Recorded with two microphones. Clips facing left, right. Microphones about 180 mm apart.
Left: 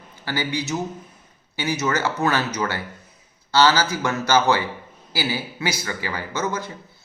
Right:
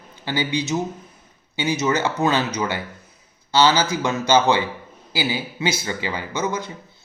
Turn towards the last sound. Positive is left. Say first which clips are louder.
# right 1 dB
turn(degrees=-15)  # may be behind; listen again after turning